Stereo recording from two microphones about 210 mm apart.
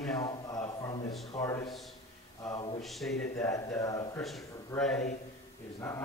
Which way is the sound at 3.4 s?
15° left (ahead or behind).